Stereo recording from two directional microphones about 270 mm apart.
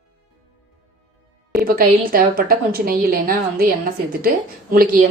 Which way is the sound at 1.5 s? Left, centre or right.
Right.